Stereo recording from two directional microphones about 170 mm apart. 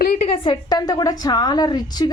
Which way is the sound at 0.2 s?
35° left (ahead or behind).